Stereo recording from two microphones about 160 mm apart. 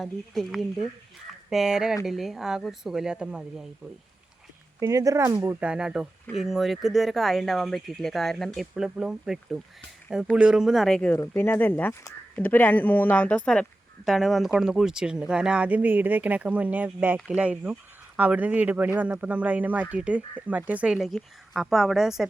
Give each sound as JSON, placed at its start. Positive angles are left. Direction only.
{"t": 0.0, "sound": "speech", "side_deg": 0}
{"t": 4.8, "sound": "speech", "side_deg": -20}
{"t": 5.5, "sound": "speech", "side_deg": -5}